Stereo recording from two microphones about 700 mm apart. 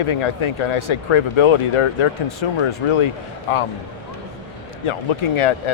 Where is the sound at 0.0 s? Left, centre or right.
Left.